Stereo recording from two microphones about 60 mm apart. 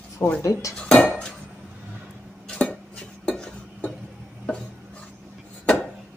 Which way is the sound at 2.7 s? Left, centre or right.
Centre.